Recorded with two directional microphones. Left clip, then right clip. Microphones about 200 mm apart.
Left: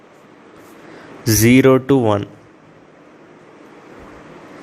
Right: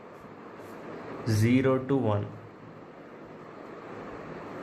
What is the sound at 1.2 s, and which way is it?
Speech, 50° left (ahead or behind).